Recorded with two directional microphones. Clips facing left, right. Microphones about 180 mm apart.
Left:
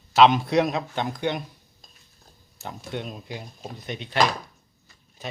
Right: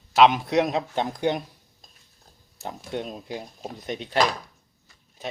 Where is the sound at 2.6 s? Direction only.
35° right (ahead or behind).